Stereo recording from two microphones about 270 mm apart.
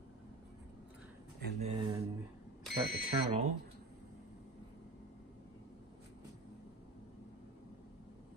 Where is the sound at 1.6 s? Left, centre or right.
Centre.